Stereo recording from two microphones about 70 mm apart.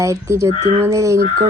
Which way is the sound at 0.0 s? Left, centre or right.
Right.